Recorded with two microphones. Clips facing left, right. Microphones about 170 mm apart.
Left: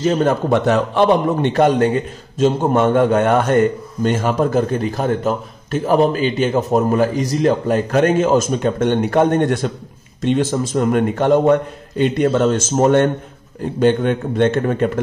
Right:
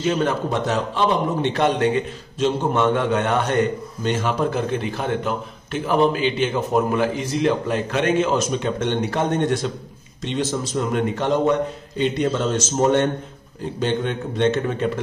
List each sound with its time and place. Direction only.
0.0 s a man's voice: 40° left (ahead or behind)
0.5 s a man's voice: 60° left (ahead or behind)